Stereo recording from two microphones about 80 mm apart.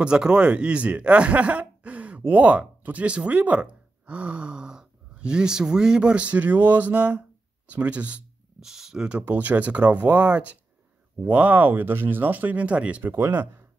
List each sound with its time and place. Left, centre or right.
0.0 s speech: centre
9.2 s speech: right
13.1 s speech: right